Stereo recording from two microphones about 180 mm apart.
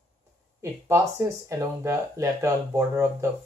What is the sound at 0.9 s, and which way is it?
Speech, 15° right (ahead or behind).